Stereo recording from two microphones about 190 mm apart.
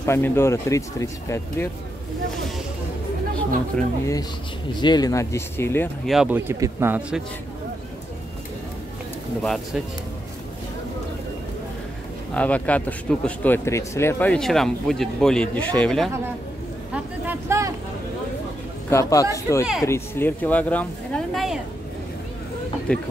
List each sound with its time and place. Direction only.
0.0 s speech: 15° left (ahead or behind)
3.7 s speech: 5° left (ahead or behind)
4.7 s speech: 20° left (ahead or behind)
6.0 s speech: 5° right (ahead or behind)
12.4 s speech: 5° left (ahead or behind)
16.9 s a sound: 10° right (ahead or behind)
18.9 s speech: 15° left (ahead or behind); by 21.5 s centre (ahead or behind)
22.9 s speech: 5° left (ahead or behind)